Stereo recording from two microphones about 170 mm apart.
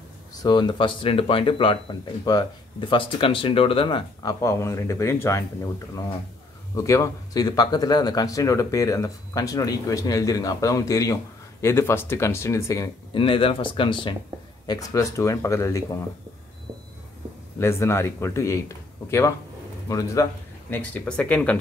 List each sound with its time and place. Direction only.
0.3 s speech: 25° left (ahead or behind)
13.1 s speech: 30° left (ahead or behind)
17.6 s speech: 15° left (ahead or behind)